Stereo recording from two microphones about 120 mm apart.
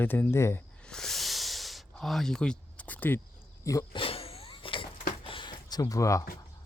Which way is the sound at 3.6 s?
30° left (ahead or behind).